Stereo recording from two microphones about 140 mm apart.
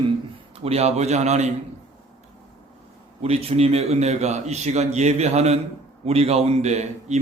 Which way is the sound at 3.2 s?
45° right (ahead or behind).